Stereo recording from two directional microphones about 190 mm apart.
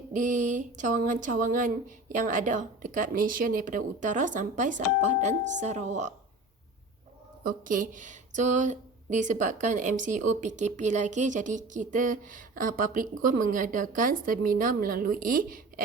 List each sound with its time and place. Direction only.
0.1 s a woman's voice: 45° right (ahead or behind)
7.4 s a woman's voice: 45° right (ahead or behind)